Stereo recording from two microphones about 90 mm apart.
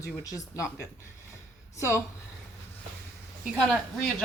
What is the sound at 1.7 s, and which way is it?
Speech, 30° left (ahead or behind).